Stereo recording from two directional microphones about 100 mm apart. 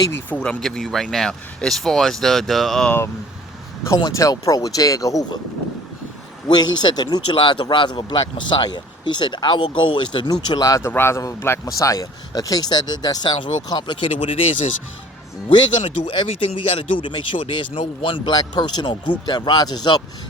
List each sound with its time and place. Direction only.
0.3 s speech: 15° left (ahead or behind)
0.6 s speech: 5° left (ahead or behind)
4.1 s speech: 35° left (ahead or behind)
6.5 s speech: 45° left (ahead or behind)
10.6 s speech: 30° left (ahead or behind); by 14.3 s 55° left (ahead or behind)
15.4 s speech: 55° left (ahead or behind)
18.3 s speech: 45° left (ahead or behind)